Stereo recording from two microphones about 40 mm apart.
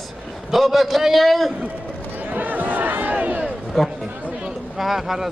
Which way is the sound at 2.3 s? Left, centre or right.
Right.